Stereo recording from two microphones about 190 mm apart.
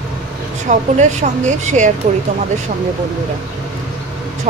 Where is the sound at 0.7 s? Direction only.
40° right (ahead or behind).